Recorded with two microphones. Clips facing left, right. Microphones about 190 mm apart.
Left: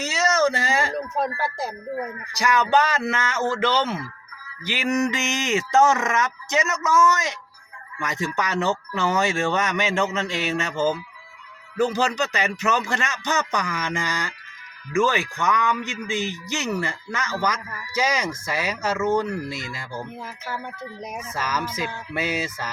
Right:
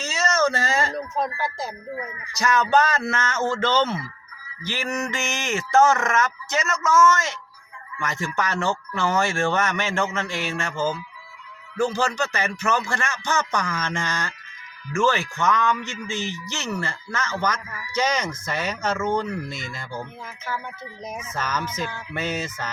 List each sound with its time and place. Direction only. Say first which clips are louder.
0.0 s a sound: left 2 dB; 15° left (ahead or behind)
1.5 s speech: left 3 dB; 60° left (ahead or behind)
2.4 s speech: even; 15° left (ahead or behind)
21.1 s speech: even; 10° left (ahead or behind)